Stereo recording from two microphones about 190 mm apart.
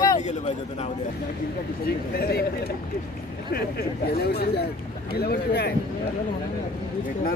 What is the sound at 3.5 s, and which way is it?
Speech, 55° left (ahead or behind).